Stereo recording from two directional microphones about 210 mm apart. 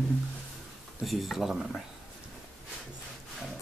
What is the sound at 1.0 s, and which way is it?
Speech, centre (ahead or behind).